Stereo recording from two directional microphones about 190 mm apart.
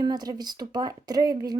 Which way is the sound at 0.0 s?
20° right (ahead or behind).